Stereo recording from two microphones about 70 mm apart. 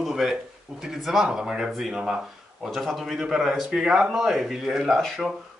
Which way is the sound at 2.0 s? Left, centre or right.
Centre.